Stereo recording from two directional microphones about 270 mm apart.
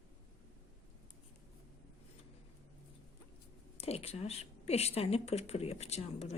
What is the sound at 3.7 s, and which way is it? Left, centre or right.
A woman's voice, left.